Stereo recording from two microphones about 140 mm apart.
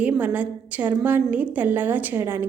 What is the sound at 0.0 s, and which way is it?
A woman's voice, 10° right (ahead or behind).